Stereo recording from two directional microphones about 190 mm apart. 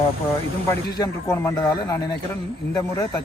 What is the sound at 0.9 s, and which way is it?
Speech, 20° left (ahead or behind).